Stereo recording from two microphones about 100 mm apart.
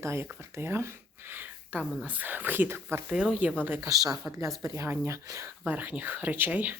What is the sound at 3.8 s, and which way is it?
Speech, 35° right (ahead or behind).